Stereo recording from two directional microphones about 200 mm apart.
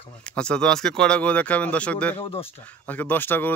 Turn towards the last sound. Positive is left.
turn(degrees=10)  # may be behind; listen again after turning